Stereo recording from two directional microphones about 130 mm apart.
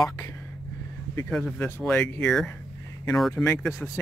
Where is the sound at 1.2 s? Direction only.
10° left (ahead or behind).